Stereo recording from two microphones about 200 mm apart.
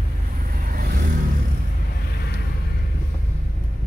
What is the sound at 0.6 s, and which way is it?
Vehicle, 45° right (ahead or behind).